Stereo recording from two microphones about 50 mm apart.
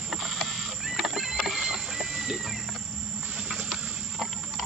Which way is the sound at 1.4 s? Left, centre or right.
Centre.